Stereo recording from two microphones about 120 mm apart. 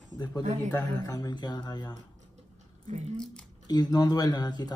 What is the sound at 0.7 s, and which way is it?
Speech, 30° left (ahead or behind).